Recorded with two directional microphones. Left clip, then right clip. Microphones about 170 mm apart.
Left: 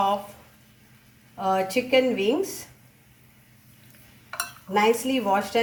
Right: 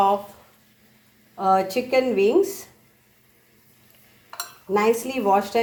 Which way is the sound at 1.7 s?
20° right (ahead or behind).